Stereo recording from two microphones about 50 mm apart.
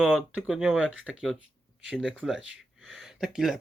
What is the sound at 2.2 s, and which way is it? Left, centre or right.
Speech, centre.